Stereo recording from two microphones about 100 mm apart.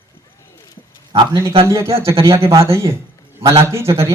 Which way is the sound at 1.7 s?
30° right (ahead or behind).